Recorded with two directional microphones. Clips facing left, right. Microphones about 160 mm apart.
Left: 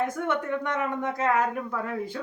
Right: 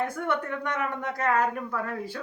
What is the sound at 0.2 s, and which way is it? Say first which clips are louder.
Speech: left 2 dB; 20° left (ahead or behind).